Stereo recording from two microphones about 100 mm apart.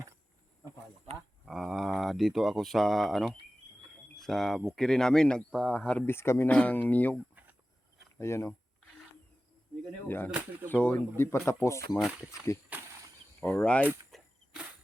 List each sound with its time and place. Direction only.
1.5 s speech: centre (ahead or behind)
6.1 s speech: 25° left (ahead or behind)
6.5 s speech: 15° left (ahead or behind)
8.2 s speech: 25° left (ahead or behind)
10.1 s speech: 20° left (ahead or behind)
11.2 s speech: 25° left (ahead or behind)
13.4 s speech: 15° left (ahead or behind)
14.1 s cricket: centre (ahead or behind)